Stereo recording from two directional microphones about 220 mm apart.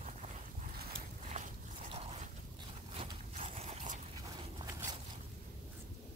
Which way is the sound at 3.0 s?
25° right (ahead or behind).